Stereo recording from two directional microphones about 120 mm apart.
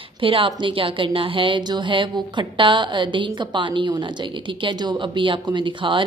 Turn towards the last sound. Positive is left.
turn(degrees=-40)  # may be behind; listen again after turning